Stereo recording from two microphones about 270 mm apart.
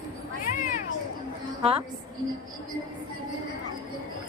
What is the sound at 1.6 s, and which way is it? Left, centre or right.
Speech, right.